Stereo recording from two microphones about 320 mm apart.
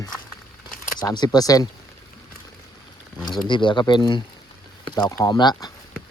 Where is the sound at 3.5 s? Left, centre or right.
Centre.